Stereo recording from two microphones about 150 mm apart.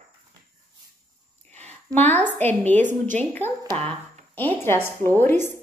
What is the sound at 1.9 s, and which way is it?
Speech, 10° left (ahead or behind).